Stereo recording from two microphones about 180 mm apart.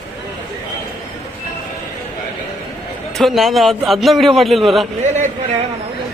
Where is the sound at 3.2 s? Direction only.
Centre (ahead or behind).